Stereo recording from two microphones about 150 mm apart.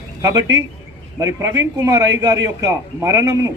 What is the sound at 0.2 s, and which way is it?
A man's voice, 25° right (ahead or behind).